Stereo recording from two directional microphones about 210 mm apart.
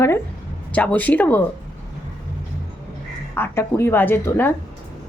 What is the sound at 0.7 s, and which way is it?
Speech, 5° left (ahead or behind).